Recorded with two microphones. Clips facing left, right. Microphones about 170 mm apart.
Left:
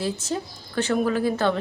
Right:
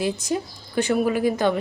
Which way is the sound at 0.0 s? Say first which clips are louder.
Right 3 dB; 15° right (ahead or behind).